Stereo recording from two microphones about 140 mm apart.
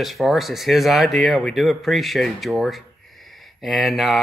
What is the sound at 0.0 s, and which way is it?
Speech, centre (ahead or behind).